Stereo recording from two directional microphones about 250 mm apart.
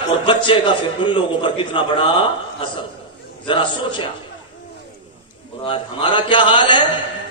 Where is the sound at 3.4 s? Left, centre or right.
Centre.